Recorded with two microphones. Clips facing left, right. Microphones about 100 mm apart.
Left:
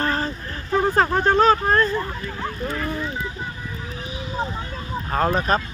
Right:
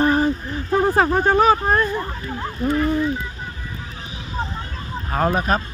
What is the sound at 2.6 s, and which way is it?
Speech, 15° right (ahead or behind).